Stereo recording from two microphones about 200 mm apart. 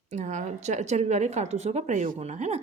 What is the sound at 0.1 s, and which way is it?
A woman's voice, 35° right (ahead or behind).